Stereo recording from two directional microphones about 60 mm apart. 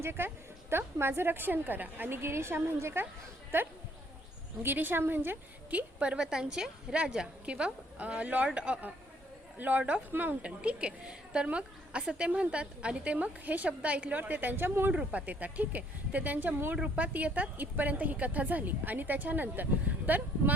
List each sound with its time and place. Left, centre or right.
0.0 s a woman's voice: right
5.7 s a woman's voice: right
10.4 s a woman's voice: centre; by 14.9 s right
14.9 s a woman's voice: right
16.7 s a woman's voice: centre